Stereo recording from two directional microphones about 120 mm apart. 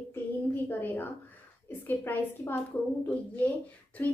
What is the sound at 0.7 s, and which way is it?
A woman's voice, 15° left (ahead or behind).